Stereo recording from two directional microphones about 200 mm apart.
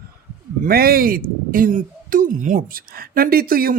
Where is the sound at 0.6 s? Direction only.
50° right (ahead or behind).